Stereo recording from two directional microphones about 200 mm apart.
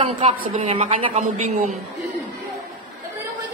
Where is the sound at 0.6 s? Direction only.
30° right (ahead or behind).